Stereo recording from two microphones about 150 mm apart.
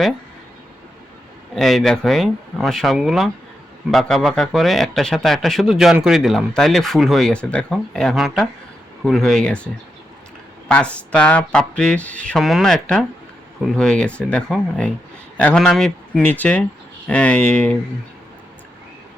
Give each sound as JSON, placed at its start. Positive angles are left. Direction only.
{"t": 1.5, "sound": "speech", "side_deg": 0}
{"t": 10.7, "sound": "speech", "side_deg": 5}